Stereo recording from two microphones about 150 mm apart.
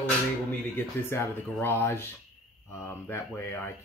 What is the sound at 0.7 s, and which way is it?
Speech, 15° left (ahead or behind).